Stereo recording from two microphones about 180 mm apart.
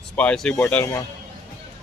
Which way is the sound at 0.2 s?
5° left (ahead or behind).